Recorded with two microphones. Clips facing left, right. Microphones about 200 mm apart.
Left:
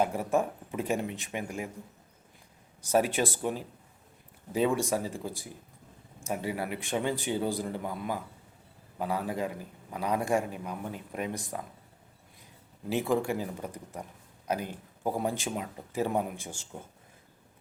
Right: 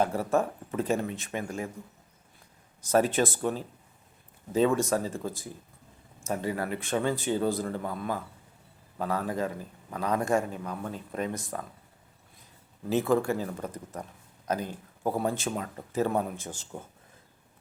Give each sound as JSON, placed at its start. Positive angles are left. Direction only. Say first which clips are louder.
{"t": 0.0, "sound": "a man's voice", "louder": "right 1 dB", "side_deg": 15}
{"t": 2.8, "sound": "a man's voice", "louder": "right 2 dB", "side_deg": 10}
{"t": 12.9, "sound": "a man's voice", "louder": "right 3 dB", "side_deg": 15}